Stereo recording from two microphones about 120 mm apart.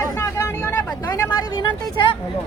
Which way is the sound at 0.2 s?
20° left (ahead or behind).